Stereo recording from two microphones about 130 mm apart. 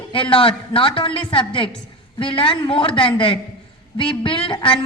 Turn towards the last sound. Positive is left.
turn(degrees=40)  # may be behind; listen again after turning